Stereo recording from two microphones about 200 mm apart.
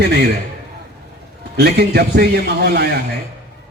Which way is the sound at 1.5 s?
55° right (ahead or behind).